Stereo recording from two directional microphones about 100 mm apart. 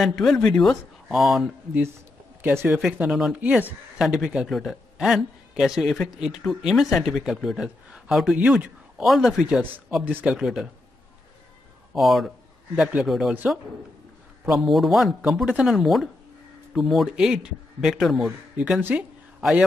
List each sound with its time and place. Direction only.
0.0 s speech: centre (ahead or behind)
2.4 s speech: 20° right (ahead or behind)
2.7 s speech: 5° right (ahead or behind)
3.3 s speech: 15° right (ahead or behind)
10.0 s speech: 15° right (ahead or behind)
11.9 s speech: centre (ahead or behind)
14.4 s speech: centre (ahead or behind)
18.8 s speech: 20° right (ahead or behind)